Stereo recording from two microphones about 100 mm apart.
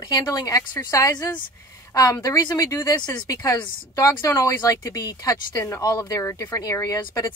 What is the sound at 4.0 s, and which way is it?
Speech, 30° left (ahead or behind).